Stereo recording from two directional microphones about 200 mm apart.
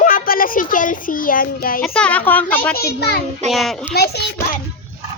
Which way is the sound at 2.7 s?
50° left (ahead or behind).